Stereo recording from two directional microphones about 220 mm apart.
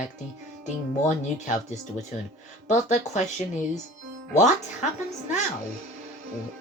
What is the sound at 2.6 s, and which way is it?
Speech, 35° left (ahead or behind).